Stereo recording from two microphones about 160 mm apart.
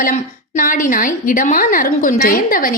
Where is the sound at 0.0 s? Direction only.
55° left (ahead or behind).